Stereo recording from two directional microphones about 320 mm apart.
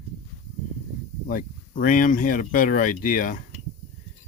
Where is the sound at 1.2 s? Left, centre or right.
Left.